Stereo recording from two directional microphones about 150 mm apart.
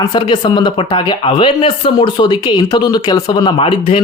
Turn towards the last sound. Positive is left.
turn(degrees=35)  # may be behind; listen again after turning